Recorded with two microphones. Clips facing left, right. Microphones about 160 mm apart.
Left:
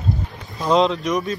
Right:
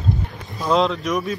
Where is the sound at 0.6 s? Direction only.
Centre (ahead or behind).